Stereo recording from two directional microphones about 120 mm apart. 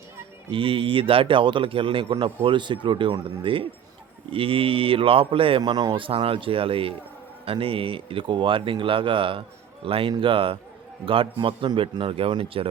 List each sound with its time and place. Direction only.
0.5 s a man's voice: 50° right (ahead or behind)
6.1 s a man's voice: 50° right (ahead or behind)